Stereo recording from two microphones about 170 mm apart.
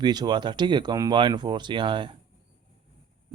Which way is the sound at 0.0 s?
25° right (ahead or behind).